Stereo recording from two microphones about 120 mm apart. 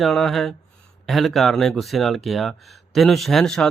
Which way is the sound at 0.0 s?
Centre (ahead or behind).